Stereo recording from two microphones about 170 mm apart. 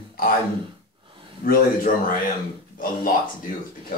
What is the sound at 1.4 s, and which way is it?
Speech, 55° left (ahead or behind).